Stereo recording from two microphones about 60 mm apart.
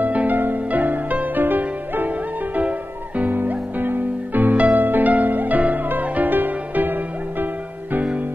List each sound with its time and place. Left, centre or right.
0.0 s music: right